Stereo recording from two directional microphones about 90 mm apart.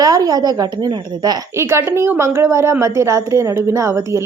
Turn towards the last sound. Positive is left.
turn(degrees=-35)  # may be behind; listen again after turning